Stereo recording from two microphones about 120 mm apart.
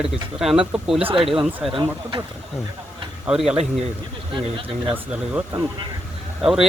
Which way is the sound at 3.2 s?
5° right (ahead or behind).